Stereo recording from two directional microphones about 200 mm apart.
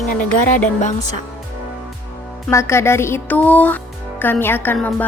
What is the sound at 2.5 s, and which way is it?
A woman's voice, 15° left (ahead or behind).